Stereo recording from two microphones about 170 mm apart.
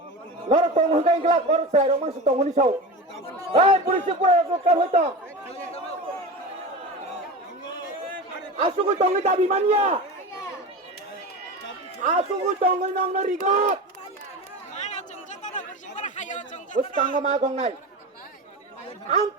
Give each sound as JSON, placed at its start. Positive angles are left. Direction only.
{"t": 0.4, "sound": "a man's voice", "side_deg": -40}
{"t": 8.6, "sound": "a man's voice", "side_deg": -45}
{"t": 12.0, "sound": "a man's voice", "side_deg": -45}
{"t": 14.8, "sound": "chatter", "side_deg": 45}
{"t": 17.1, "sound": "a man's voice", "side_deg": -45}